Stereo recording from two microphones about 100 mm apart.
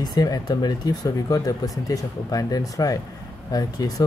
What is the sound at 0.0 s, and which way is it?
Speech, 40° left (ahead or behind).